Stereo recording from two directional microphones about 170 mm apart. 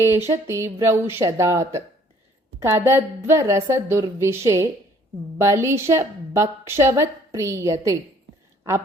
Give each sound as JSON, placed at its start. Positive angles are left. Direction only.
{"t": 0.0, "sound": "a woman's voice", "side_deg": -15}